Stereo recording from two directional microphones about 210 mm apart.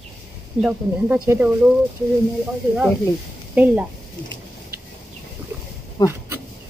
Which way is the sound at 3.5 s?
5° right (ahead or behind).